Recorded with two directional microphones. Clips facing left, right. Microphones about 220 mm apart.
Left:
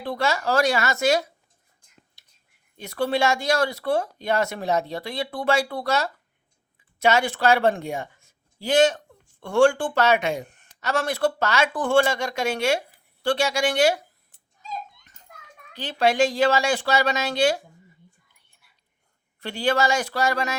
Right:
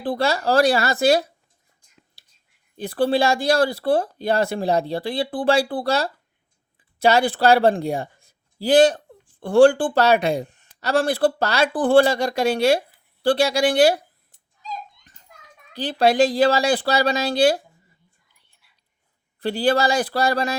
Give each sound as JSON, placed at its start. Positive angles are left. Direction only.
{"t": 0.0, "sound": "speech", "side_deg": -35}
{"t": 2.2, "sound": "whispering", "side_deg": -30}
{"t": 2.7, "sound": "speech", "side_deg": -30}
{"t": 15.7, "sound": "speech", "side_deg": -35}
{"t": 19.4, "sound": "speech", "side_deg": -35}